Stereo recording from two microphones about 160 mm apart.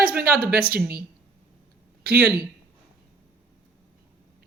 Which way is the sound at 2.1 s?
75° right (ahead or behind).